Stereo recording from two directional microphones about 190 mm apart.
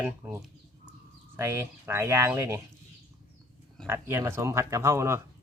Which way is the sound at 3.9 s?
10° right (ahead or behind).